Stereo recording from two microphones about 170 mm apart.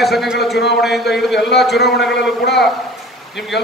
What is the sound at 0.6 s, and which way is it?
Speech, 80° left.